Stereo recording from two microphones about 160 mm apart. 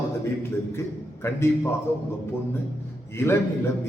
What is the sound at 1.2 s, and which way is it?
Speech, 15° left (ahead or behind).